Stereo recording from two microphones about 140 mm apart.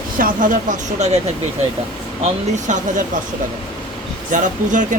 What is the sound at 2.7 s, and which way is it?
Speech, 60° right (ahead or behind).